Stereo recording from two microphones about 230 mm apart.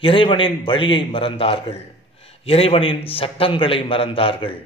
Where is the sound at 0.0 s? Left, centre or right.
Left.